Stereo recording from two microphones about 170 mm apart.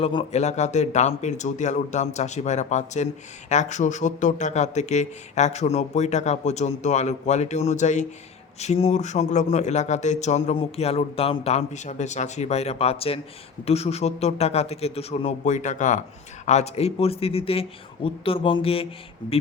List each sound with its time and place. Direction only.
0.0 s speech: 35° left (ahead or behind)